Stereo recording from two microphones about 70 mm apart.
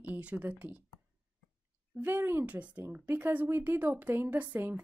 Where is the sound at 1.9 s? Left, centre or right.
Right.